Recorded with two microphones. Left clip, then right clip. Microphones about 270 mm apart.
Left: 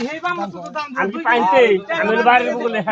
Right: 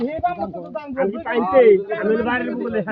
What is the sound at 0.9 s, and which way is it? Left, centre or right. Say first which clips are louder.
A man's voice: left 4 dB; left.